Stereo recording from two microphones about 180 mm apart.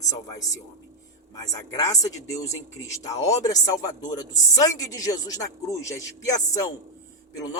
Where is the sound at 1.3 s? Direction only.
20° left (ahead or behind).